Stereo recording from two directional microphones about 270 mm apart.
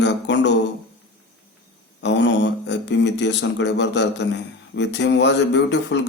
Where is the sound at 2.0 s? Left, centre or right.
Left.